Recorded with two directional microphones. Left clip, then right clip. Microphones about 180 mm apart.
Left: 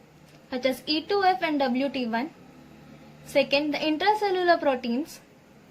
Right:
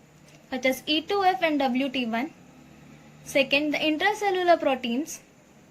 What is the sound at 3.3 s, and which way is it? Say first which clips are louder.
A woman's voice: even; 40° right (ahead or behind).